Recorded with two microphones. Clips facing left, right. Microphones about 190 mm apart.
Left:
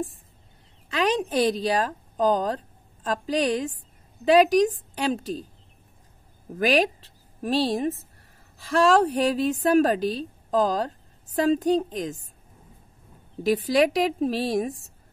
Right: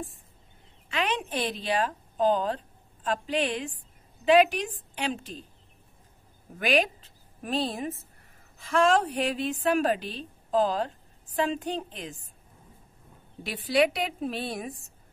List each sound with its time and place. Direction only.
0.8 s a woman's voice: 40° left (ahead or behind)
6.6 s a woman's voice: 35° left (ahead or behind)
13.4 s a woman's voice: 40° left (ahead or behind)